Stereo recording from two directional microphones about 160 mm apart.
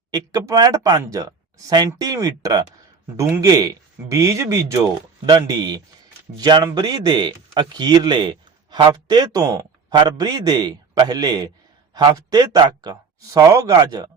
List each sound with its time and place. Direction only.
0.1 s speech: 20° right (ahead or behind)